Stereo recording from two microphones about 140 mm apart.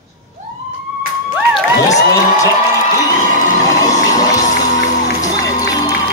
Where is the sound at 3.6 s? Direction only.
25° left (ahead or behind).